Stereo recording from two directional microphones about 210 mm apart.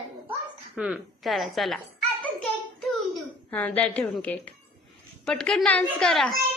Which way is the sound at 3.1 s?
5° left (ahead or behind).